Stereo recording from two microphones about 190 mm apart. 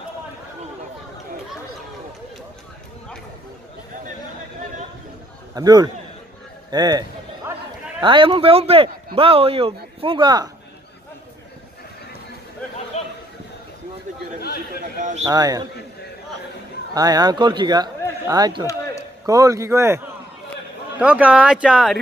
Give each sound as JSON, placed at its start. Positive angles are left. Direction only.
{"t": 5.5, "sound": "a man's voice", "side_deg": -20}
{"t": 6.7, "sound": "a sound", "side_deg": -20}
{"t": 8.0, "sound": "a man's voice", "side_deg": -25}
{"t": 12.9, "sound": "a sound", "side_deg": 35}
{"t": 15.0, "sound": "speech", "side_deg": -45}
{"t": 15.2, "sound": "a man's voice", "side_deg": -20}
{"t": 16.9, "sound": "a man's voice", "side_deg": -20}
{"t": 21.0, "sound": "speech", "side_deg": -5}